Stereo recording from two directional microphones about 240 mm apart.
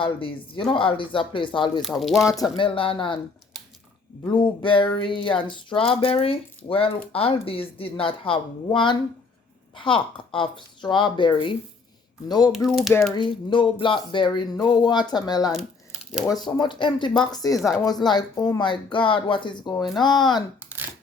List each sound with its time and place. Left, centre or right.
0.0 s speech: left
2.0 s speech: centre
2.6 s speech: left
4.3 s speech: left
12.5 s speech: centre
13.5 s speech: left
15.5 s a sound: centre
16.3 s speech: centre